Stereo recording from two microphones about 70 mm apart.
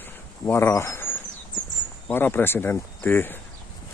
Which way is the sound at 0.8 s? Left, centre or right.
Left.